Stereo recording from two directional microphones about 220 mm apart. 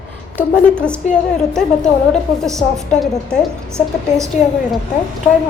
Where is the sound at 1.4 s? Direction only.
Centre (ahead or behind).